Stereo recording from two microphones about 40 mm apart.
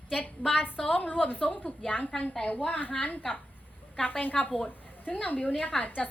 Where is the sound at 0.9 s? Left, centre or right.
Left.